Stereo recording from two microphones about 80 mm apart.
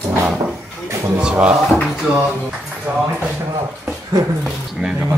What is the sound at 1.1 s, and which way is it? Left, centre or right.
Speech, centre.